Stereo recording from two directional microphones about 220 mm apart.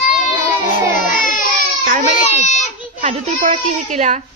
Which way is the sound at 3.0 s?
30° right (ahead or behind).